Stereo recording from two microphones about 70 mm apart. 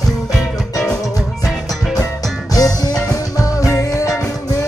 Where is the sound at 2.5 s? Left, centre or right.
Left.